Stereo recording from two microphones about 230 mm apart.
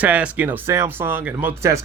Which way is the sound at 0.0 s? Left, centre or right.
Centre.